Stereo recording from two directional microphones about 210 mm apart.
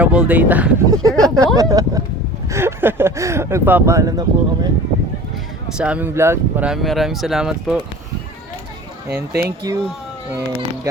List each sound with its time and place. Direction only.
0.0 s speech: 5° right (ahead or behind)
5.7 s speech: 5° right (ahead or behind)
9.0 s speech: 50° right (ahead or behind)
9.7 s speech: 15° right (ahead or behind)